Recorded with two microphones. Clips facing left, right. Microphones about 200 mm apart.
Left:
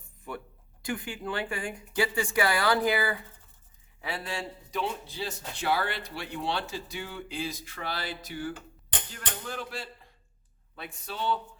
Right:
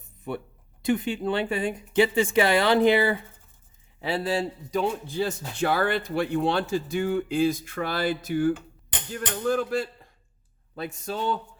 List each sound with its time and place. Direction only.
0.3 s a man's voice: 25° right (ahead or behind); by 11.3 s 45° right (ahead or behind)